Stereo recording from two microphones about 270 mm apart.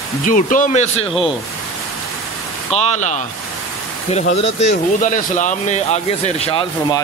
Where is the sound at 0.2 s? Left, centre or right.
Left.